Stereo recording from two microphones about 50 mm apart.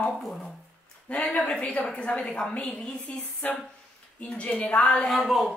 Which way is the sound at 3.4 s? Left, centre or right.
Left.